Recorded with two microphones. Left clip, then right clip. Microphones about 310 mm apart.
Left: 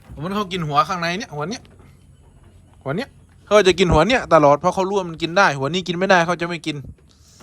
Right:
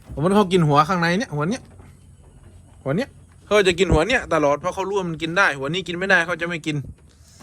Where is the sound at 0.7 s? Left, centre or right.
Centre.